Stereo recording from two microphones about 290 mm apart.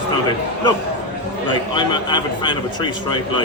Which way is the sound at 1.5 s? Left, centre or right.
Centre.